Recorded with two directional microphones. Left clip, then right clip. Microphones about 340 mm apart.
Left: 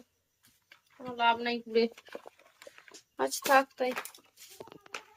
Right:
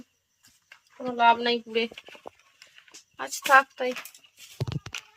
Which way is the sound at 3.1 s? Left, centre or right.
Centre.